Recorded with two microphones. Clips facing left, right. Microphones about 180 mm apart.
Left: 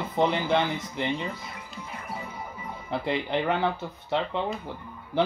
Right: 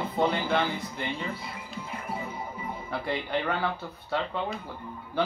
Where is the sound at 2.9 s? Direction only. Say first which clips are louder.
Left 3 dB; 20° left (ahead or behind).